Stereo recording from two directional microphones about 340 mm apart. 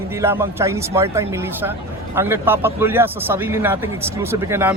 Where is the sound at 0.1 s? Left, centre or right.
Centre.